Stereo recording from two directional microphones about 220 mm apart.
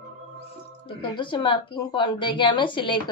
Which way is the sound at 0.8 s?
20° left (ahead or behind).